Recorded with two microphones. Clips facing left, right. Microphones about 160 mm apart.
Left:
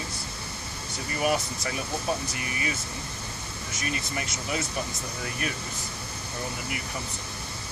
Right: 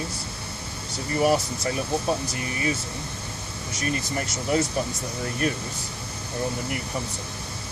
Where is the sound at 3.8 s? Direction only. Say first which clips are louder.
Right 5 dB; 35° right (ahead or behind).